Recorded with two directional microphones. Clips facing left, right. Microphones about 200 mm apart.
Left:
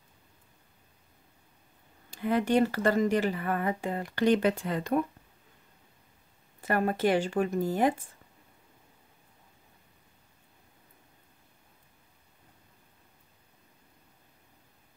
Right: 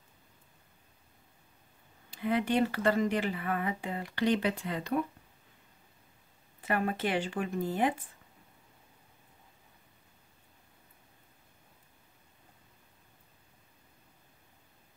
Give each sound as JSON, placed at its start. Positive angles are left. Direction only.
{"t": 2.0, "sound": "speech", "side_deg": 45}
{"t": 6.6, "sound": "speech", "side_deg": 40}